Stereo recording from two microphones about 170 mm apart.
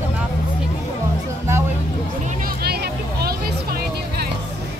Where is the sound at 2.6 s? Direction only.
70° right (ahead or behind).